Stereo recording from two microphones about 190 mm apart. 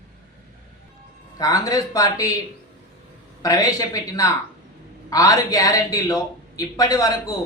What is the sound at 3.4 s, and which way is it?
A man's voice, 15° left (ahead or behind).